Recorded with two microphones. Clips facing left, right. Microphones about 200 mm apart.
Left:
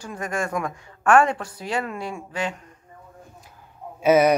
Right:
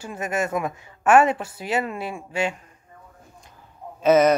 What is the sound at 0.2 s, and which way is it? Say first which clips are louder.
Speech: right 2 dB; 20° right (ahead or behind).